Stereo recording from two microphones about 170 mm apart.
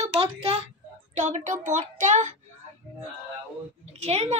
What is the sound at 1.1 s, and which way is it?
A child's voice, 45° right (ahead or behind).